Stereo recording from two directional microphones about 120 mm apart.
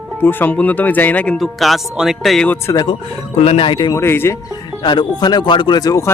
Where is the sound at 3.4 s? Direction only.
60° left (ahead or behind).